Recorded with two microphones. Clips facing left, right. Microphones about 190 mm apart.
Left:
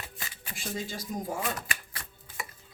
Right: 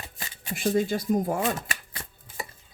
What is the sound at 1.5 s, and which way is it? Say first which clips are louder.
Chopping: right 3 dB; 25° right (ahead or behind).